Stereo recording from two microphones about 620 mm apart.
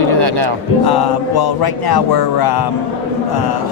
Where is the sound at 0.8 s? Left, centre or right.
Left.